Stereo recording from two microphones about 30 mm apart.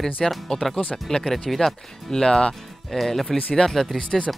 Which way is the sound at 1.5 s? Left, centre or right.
Centre.